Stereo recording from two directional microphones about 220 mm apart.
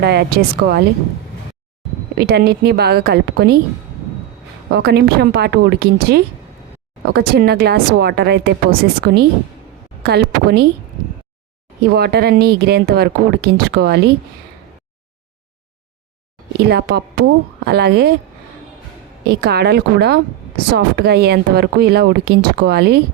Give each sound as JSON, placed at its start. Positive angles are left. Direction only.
{"t": 0.0, "sound": "speech", "side_deg": -45}
{"t": 2.1, "sound": "speech", "side_deg": -45}
{"t": 4.7, "sound": "speech", "side_deg": -50}
{"t": 11.8, "sound": "speech", "side_deg": -45}
{"t": 16.6, "sound": "speech", "side_deg": -50}
{"t": 19.3, "sound": "speech", "side_deg": -45}